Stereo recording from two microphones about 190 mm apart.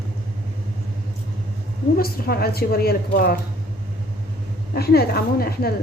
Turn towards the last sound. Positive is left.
turn(degrees=55)  # may be behind; listen again after turning